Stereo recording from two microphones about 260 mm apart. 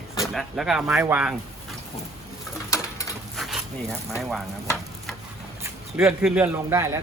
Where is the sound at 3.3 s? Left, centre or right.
Centre.